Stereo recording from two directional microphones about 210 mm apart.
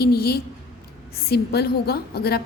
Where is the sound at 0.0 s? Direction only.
50° left (ahead or behind).